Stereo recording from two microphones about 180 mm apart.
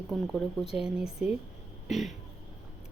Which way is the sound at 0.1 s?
Centre (ahead or behind).